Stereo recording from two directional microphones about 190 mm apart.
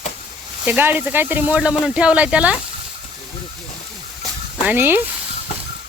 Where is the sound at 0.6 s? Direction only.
10° right (ahead or behind).